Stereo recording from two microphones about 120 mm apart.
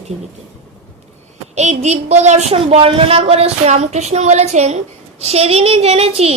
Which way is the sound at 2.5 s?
50° right (ahead or behind).